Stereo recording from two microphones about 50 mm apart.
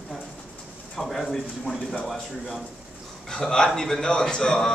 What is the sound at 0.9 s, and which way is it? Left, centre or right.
Speech, centre.